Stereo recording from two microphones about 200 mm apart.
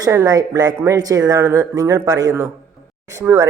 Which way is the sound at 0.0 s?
15° right (ahead or behind).